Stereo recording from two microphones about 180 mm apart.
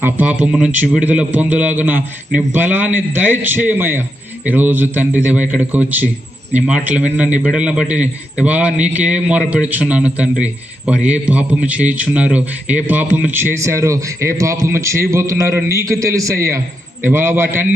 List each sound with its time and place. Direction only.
0.0 s a man's voice: 10° right (ahead or behind)